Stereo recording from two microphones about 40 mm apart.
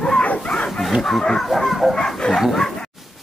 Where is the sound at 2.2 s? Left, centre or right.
Left.